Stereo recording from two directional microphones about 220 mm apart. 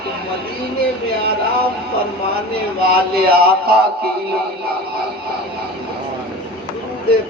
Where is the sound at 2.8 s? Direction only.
45° right (ahead or behind).